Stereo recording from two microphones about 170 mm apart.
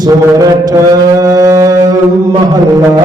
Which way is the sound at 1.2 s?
20° right (ahead or behind).